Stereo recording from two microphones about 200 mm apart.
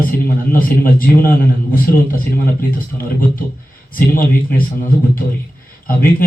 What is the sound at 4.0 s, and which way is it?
Speech, 45° left (ahead or behind).